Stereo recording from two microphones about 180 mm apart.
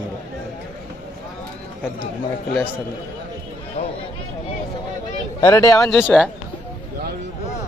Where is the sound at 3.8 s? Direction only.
40° left (ahead or behind).